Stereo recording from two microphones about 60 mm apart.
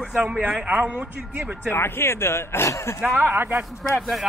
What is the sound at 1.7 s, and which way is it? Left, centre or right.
Speech, left.